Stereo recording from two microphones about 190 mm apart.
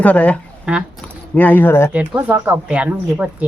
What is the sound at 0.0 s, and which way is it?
Speech, 5° left (ahead or behind).